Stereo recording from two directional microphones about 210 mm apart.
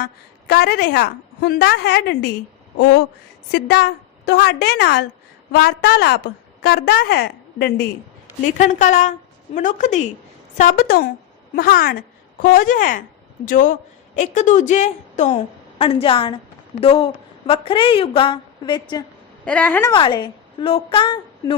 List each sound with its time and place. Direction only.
0.0 s a woman's voice: 50° left (ahead or behind)
2.7 s a sound: 55° left (ahead or behind)
3.5 s a woman's voice: 50° left (ahead or behind)
8.4 s a woman's voice: 35° left (ahead or behind)
19.5 s a woman's voice: 5° left (ahead or behind)
19.9 s a woman's voice: 20° left (ahead or behind)